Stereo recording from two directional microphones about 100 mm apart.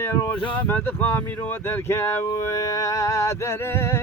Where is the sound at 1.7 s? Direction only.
25° left (ahead or behind).